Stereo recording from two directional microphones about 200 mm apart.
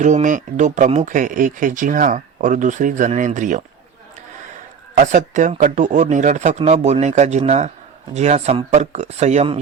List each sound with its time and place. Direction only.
0.0 s speech: 40° right (ahead or behind)
4.9 s speech: 40° right (ahead or behind)